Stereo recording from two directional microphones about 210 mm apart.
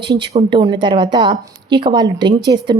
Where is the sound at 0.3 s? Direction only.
20° right (ahead or behind).